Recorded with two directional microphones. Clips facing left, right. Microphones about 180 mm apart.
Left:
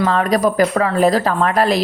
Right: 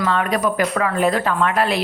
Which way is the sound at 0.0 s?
35° left (ahead or behind).